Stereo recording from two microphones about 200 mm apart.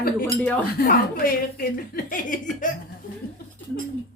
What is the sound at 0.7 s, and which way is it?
Speech, 45° left (ahead or behind).